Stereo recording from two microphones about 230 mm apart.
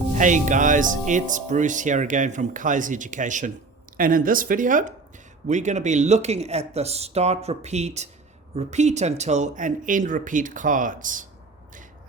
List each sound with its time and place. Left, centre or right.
0.1 s speech: right